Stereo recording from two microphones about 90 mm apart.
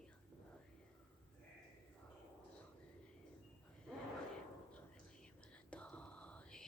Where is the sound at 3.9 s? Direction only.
5° left (ahead or behind).